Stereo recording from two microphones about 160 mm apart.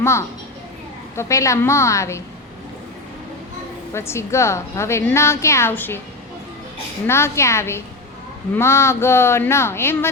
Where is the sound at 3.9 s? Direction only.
15° left (ahead or behind).